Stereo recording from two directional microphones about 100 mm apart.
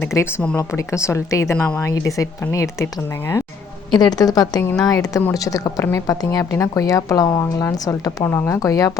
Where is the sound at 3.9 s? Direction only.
45° left (ahead or behind).